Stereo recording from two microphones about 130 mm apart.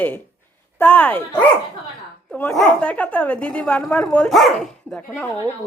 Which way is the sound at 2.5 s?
10° left (ahead or behind).